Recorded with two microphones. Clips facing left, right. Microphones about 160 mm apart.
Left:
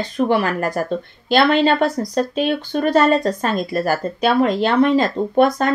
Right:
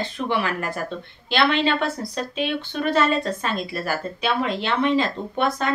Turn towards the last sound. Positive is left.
turn(degrees=45)  # may be behind; listen again after turning